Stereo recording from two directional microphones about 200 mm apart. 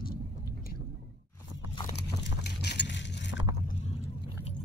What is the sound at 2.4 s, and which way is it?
Vehicle, 55° left (ahead or behind).